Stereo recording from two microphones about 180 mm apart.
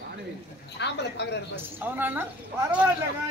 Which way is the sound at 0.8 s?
70° left (ahead or behind).